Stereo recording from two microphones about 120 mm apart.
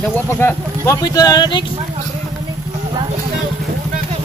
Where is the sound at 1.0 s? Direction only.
35° left (ahead or behind).